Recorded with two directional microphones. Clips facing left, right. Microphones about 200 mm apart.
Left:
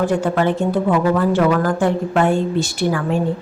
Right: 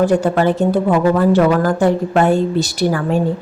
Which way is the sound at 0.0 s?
35° right (ahead or behind).